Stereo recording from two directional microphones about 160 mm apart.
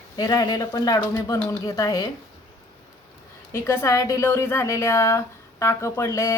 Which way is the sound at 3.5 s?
15° left (ahead or behind).